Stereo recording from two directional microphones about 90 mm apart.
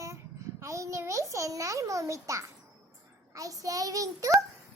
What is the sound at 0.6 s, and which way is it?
A child's voice, 35° right (ahead or behind).